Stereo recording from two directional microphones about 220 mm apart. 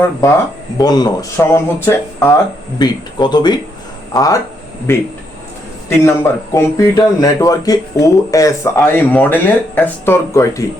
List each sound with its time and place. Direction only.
0.8 s speech: 20° left (ahead or behind)